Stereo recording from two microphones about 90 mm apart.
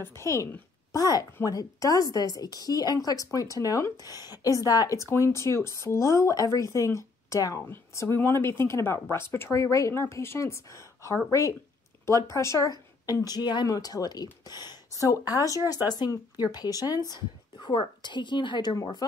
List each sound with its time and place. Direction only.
0.0 s a woman's voice: 30° left (ahead or behind)
0.9 s a woman's voice: 45° left (ahead or behind)
17.6 s speech: 65° left (ahead or behind)